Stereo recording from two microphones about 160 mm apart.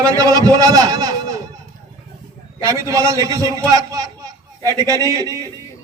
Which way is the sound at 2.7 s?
20° right (ahead or behind).